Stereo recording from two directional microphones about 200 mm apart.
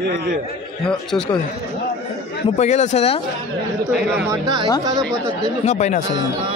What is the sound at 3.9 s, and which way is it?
Speech, 5° right (ahead or behind).